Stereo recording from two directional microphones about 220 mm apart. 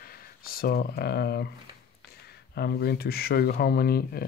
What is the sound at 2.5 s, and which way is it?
Speech, 45° left (ahead or behind).